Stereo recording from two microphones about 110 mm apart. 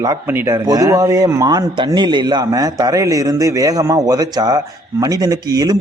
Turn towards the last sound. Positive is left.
turn(degrees=-35)  # may be behind; listen again after turning